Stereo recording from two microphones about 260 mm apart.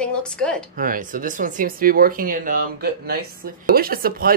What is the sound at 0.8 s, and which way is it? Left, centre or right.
Speech, right.